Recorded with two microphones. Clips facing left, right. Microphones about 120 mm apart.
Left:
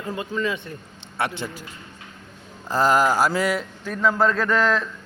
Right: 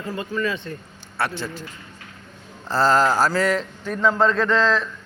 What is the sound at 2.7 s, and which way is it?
A man's voice, 15° left (ahead or behind).